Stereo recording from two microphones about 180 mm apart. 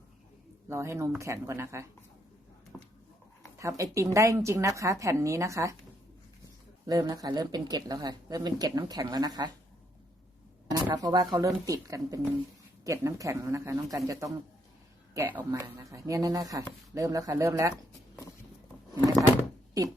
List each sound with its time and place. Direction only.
0.7 s speech: 15° right (ahead or behind)
2.7 s a sound: 5° left (ahead or behind)
3.6 s speech: 15° right (ahead or behind)
6.8 s speech: 20° right (ahead or behind)
10.7 s speech: 20° right (ahead or behind)
15.4 s speech: 15° right (ahead or behind)